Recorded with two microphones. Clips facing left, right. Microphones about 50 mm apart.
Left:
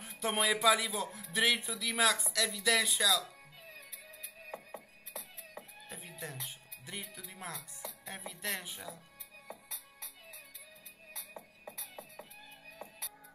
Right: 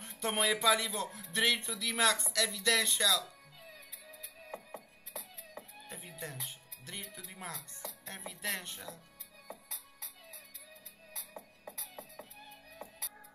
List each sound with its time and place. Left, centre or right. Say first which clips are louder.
0.0 s speech: even; centre
5.1 s music: even; left
5.9 s speech: even; centre